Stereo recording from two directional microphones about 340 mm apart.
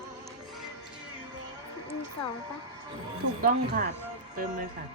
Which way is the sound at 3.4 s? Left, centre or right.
Right.